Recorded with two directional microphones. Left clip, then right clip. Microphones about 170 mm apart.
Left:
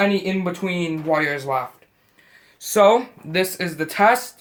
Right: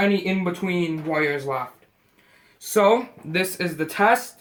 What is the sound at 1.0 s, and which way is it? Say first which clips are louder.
Speech: left 4 dB; 40° left (ahead or behind).